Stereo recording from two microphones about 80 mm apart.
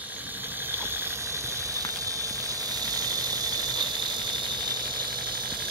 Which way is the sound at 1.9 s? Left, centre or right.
Right.